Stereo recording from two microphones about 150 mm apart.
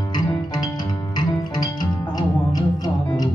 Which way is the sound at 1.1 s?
25° left (ahead or behind).